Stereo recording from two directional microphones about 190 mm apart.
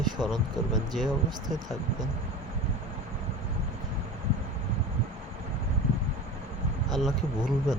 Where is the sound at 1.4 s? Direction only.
20° right (ahead or behind).